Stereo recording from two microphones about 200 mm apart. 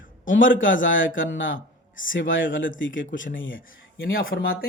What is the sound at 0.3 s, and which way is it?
Speech, 70° left (ahead or behind).